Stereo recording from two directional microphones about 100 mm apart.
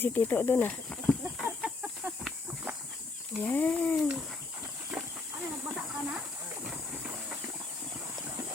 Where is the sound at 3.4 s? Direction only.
10° left (ahead or behind).